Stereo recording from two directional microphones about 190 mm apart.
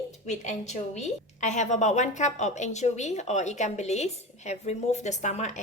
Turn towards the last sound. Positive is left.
turn(degrees=40)  # may be behind; listen again after turning